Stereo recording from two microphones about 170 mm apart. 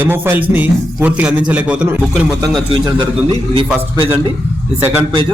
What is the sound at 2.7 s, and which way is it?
Speech, 30° right (ahead or behind).